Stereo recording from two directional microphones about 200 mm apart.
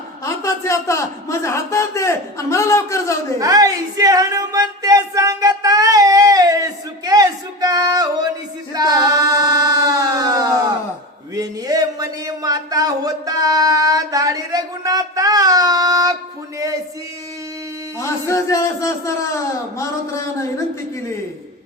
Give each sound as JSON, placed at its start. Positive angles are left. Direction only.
{"t": 0.3, "sound": "a man's voice", "side_deg": 15}
{"t": 3.4, "sound": "speech", "side_deg": -15}
{"t": 8.7, "sound": "child singing", "side_deg": -20}
{"t": 11.3, "sound": "a sound", "side_deg": -15}
{"t": 18.0, "sound": "a man's voice", "side_deg": 15}